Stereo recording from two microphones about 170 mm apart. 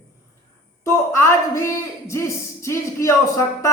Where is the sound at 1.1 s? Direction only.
15° left (ahead or behind).